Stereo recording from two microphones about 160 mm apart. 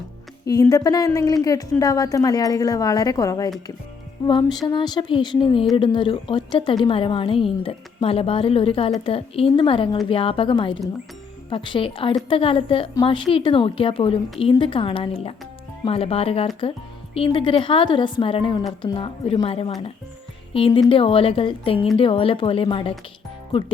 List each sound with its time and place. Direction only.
0.4 s a woman's voice: 20° left (ahead or behind)